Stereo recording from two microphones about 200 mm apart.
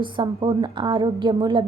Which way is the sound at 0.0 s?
25° right (ahead or behind).